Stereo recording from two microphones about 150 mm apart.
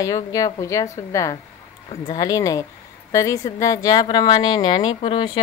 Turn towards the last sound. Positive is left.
turn(degrees=35)  # may be behind; listen again after turning